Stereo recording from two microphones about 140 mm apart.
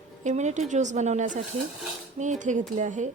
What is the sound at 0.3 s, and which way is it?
Speech, 60° right (ahead or behind).